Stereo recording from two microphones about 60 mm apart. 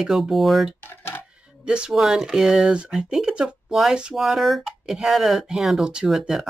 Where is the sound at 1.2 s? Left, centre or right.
Centre.